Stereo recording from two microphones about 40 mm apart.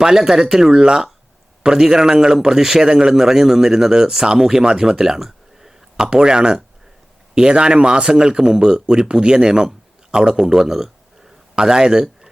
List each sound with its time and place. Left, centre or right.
0.0 s a man's voice: centre